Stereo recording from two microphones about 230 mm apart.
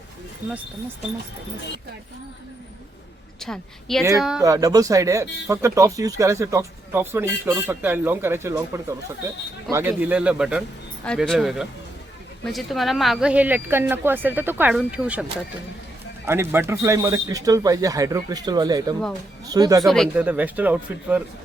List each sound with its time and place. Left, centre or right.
3.4 s speech: centre
4.4 s speech: centre
16.2 s speech: centre
19.8 s speech: centre